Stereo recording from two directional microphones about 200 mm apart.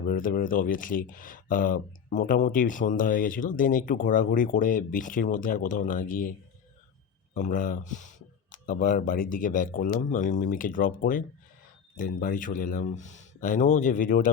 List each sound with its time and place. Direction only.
0.1 s speech: 45° left (ahead or behind)
7.3 s speech: 40° left (ahead or behind)